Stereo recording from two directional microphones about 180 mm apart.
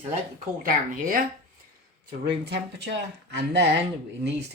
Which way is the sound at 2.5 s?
75° right (ahead or behind).